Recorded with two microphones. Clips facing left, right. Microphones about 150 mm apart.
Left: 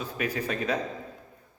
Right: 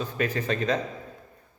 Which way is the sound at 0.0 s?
10° left (ahead or behind).